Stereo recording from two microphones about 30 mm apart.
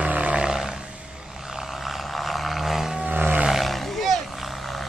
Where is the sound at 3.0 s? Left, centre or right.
Right.